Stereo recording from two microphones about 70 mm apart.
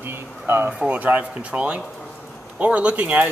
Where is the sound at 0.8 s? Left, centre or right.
Right.